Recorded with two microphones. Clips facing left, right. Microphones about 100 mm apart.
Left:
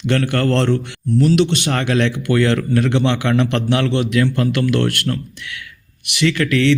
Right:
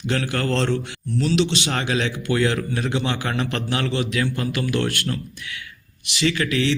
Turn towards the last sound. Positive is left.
turn(degrees=60)  # may be behind; listen again after turning